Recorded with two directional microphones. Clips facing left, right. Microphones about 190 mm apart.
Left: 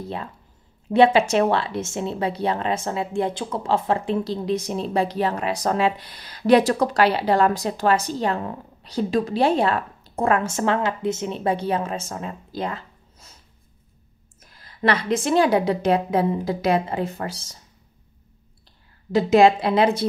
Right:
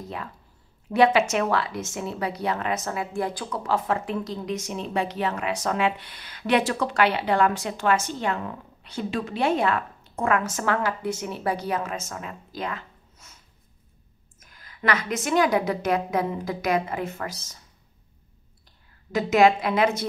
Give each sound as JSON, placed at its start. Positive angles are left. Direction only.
{"t": 0.8, "sound": "a woman's voice", "side_deg": 30}
{"t": 14.4, "sound": "a woman's voice", "side_deg": 30}
{"t": 19.1, "sound": "a woman's voice", "side_deg": 30}